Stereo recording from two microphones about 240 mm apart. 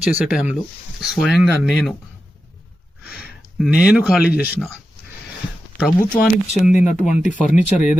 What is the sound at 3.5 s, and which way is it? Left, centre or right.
Speech, centre.